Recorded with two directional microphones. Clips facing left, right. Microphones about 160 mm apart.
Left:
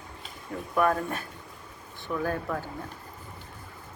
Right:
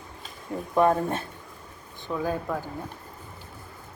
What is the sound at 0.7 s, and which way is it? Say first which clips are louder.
Speech: right 4 dB; 25° right (ahead or behind).